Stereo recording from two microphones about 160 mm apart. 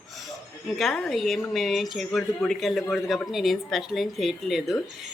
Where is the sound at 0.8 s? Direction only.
5° left (ahead or behind).